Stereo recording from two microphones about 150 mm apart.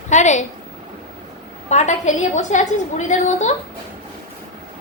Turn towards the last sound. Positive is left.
turn(degrees=55)  # may be behind; listen again after turning